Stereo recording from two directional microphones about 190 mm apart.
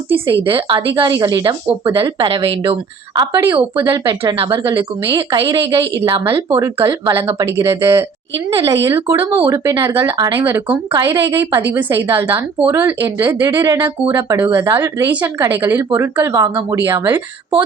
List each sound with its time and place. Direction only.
0.4 s a woman's voice: 25° right (ahead or behind); by 17.6 s 10° right (ahead or behind)